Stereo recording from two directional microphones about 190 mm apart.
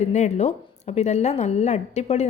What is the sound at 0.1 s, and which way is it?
A woman's voice, 35° left (ahead or behind).